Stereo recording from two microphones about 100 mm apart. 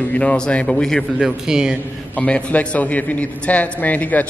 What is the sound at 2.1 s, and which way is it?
A man's voice, 15° left (ahead or behind).